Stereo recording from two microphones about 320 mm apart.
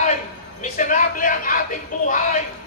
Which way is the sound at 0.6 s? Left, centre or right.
Left.